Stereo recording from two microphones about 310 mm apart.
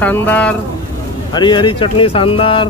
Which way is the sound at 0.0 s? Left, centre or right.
Centre.